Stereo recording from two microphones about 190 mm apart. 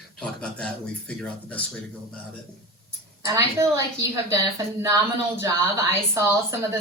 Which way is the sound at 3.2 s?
15° right (ahead or behind).